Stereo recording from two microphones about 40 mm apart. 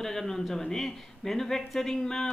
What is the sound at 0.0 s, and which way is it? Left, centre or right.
Speech, centre.